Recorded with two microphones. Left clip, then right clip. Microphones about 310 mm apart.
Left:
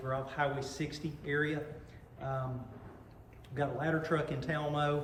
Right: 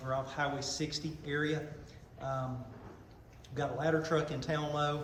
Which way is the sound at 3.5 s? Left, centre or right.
Centre.